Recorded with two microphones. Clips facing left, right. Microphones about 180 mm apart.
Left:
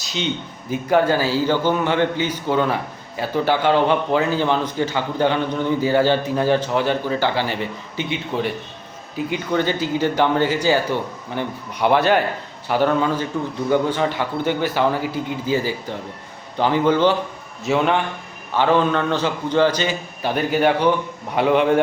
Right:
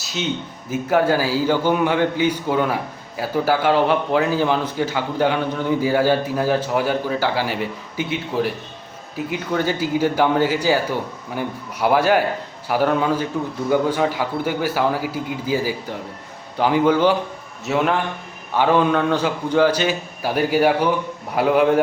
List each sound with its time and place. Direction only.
0.0 s a sound: 5° right (ahead or behind)
0.7 s a man's voice: 5° right (ahead or behind)
18.5 s a man's voice: 10° right (ahead or behind)